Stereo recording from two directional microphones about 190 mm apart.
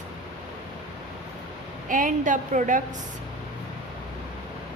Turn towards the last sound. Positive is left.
turn(degrees=-40)  # may be behind; listen again after turning